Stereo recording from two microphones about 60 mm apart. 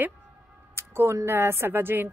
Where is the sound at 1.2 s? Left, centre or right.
Right.